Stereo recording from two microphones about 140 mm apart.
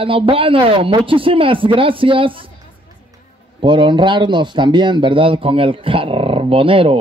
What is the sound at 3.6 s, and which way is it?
Speech, 35° right (ahead or behind).